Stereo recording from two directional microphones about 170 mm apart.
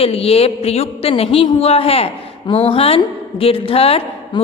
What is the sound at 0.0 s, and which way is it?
A woman's voice, 35° left (ahead or behind).